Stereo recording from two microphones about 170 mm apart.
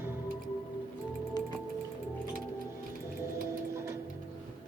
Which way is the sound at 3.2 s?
15° right (ahead or behind).